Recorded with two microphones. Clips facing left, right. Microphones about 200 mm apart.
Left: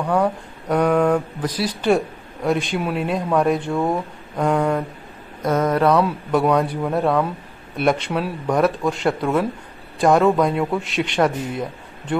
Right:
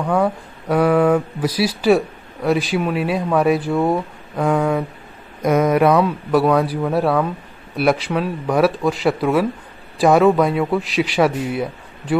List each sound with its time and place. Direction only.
0.1 s speech: 5° right (ahead or behind)